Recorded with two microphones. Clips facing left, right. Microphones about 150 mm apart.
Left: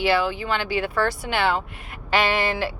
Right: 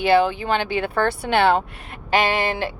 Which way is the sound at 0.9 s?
55° right (ahead or behind).